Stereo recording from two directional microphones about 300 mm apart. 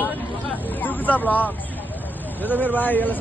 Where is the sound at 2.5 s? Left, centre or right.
Centre.